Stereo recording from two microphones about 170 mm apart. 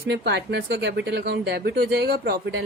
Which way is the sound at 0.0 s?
75° right (ahead or behind).